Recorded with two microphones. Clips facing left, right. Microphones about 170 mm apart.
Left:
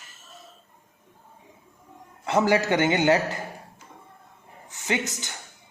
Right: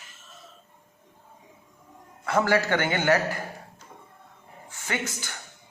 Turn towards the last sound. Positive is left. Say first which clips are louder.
# left 4 dB
turn(degrees=20)  # may be behind; listen again after turning